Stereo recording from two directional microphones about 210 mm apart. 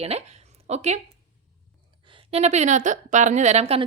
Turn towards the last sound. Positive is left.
turn(degrees=-30)  # may be behind; listen again after turning